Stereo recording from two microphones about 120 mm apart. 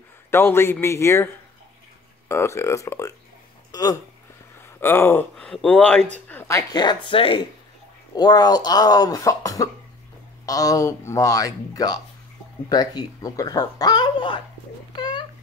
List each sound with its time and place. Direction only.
0.3 s speech: 20° left (ahead or behind)
4.7 s speech: 15° left (ahead or behind)
6.7 s speech: 35° left (ahead or behind)
8.2 s speech: 35° left (ahead or behind)
15.0 s a sound: 35° left (ahead or behind)